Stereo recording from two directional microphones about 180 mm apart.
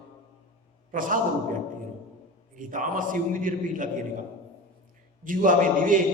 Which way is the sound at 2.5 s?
50° right (ahead or behind).